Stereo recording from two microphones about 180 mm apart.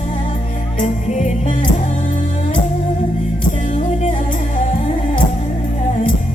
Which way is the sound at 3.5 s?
40° left (ahead or behind).